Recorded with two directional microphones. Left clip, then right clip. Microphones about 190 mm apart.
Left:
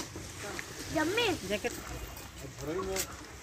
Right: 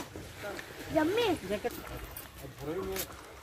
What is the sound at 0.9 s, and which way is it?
Speech, 60° right (ahead or behind).